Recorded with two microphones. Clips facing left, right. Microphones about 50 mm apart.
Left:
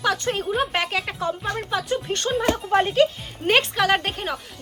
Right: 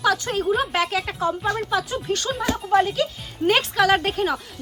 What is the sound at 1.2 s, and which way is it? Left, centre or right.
Speech, right.